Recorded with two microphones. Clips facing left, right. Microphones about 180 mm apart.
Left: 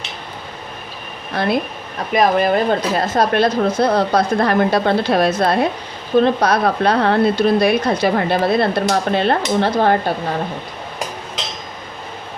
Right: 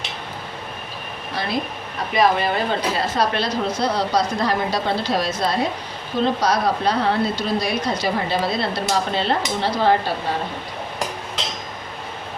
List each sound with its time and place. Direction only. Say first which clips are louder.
1.3 s speech: left 6 dB; 55° left (ahead or behind)